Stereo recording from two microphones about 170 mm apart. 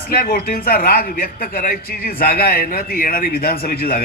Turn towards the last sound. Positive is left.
turn(degrees=60)  # may be behind; listen again after turning